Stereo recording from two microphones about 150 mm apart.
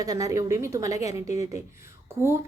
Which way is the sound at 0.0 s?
20° right (ahead or behind).